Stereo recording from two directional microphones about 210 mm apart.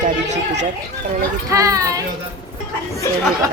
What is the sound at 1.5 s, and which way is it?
Speech, 15° right (ahead or behind).